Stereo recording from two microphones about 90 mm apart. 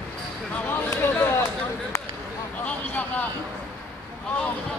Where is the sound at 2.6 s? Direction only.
15° left (ahead or behind).